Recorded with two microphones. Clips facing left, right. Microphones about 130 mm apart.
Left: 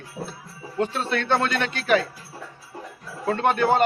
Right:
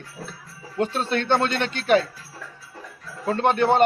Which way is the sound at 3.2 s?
30° right (ahead or behind).